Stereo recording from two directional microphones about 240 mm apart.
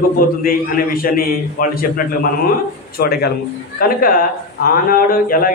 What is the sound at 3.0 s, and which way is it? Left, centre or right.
A man's voice, left.